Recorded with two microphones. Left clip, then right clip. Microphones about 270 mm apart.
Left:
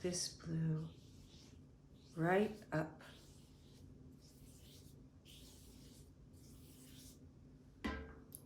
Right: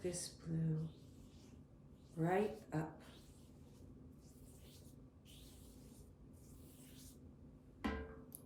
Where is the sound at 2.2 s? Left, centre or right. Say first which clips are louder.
Left 2 dB; left.